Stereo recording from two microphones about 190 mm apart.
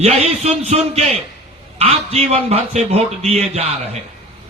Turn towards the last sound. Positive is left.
turn(degrees=-35)  # may be behind; listen again after turning